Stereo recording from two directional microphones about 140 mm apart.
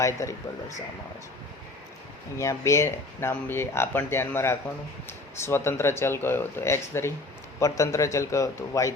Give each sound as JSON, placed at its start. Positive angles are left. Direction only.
{"t": 0.0, "sound": "a man's voice", "side_deg": 20}
{"t": 2.4, "sound": "a man's voice", "side_deg": 20}